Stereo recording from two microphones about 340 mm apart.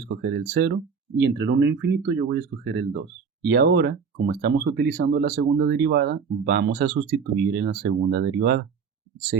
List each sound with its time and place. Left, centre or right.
0.0 s speech: right